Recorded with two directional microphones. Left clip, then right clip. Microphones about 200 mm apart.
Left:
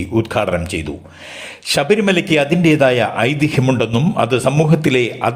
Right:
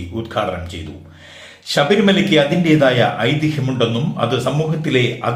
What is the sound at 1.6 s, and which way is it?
A man's voice, 35° left (ahead or behind).